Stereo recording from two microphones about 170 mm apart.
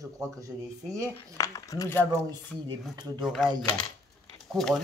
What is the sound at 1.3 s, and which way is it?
Speech, 20° left (ahead or behind).